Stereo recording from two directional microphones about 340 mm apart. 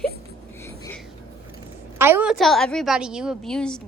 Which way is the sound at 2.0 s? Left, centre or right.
Centre.